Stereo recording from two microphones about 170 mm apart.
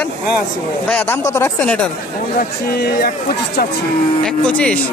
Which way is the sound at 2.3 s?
65° left (ahead or behind).